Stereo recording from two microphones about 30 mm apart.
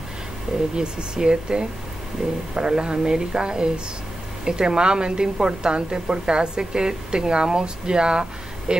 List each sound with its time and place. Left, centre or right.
0.7 s a woman's voice: right
3.0 s a woman's voice: centre